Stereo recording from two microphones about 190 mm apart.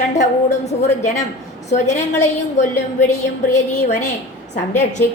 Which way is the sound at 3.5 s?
40° left (ahead or behind).